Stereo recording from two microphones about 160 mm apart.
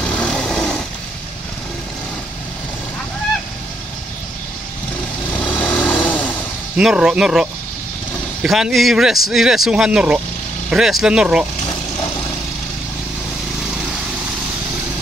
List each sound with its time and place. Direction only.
0.0 s a sound: 5° left (ahead or behind)
5.3 s vehicle: 5° left (ahead or behind)
6.8 s speech: 5° right (ahead or behind)